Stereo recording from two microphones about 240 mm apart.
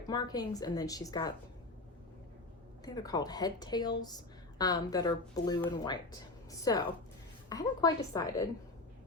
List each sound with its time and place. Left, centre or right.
0.1 s a woman's voice: centre
2.8 s a woman's voice: centre